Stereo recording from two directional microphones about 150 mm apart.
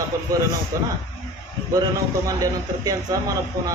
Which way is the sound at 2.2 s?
20° right (ahead or behind).